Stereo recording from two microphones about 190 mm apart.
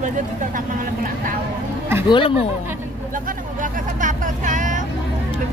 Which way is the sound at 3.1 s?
45° right (ahead or behind).